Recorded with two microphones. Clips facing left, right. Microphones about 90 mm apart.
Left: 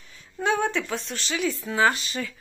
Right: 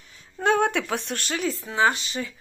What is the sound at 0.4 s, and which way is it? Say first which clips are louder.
Speech: right 3 dB; 50° right (ahead or behind).